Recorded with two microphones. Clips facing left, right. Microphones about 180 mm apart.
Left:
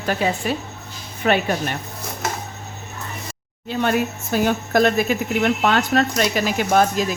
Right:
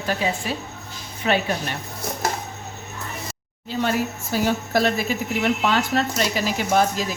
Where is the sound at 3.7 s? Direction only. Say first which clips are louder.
Left 3 dB; 60° left (ahead or behind).